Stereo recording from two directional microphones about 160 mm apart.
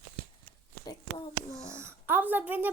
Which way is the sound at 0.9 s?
30° left (ahead or behind).